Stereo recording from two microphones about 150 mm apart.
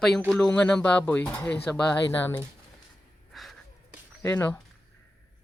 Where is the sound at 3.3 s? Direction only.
Centre (ahead or behind).